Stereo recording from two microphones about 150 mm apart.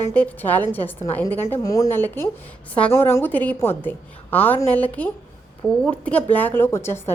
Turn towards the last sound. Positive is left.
turn(degrees=15)  # may be behind; listen again after turning